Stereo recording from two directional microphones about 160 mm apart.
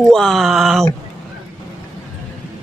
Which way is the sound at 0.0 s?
5° left (ahead or behind).